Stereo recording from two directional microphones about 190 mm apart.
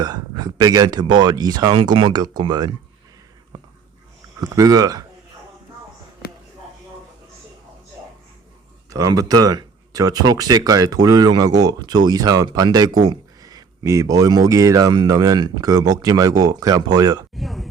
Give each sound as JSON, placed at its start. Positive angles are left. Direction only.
{"t": 0.0, "sound": "speech", "side_deg": -20}
{"t": 4.4, "sound": "speech", "side_deg": -20}
{"t": 8.9, "sound": "speech", "side_deg": -20}
{"t": 17.3, "sound": "speech", "side_deg": 0}